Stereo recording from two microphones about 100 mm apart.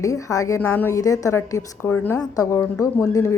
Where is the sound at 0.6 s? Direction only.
20° left (ahead or behind).